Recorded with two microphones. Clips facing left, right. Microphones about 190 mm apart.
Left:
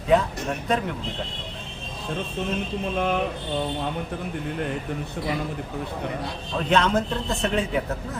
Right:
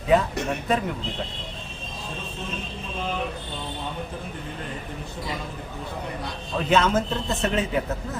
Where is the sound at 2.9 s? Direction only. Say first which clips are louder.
Left 5 dB; 60° left (ahead or behind).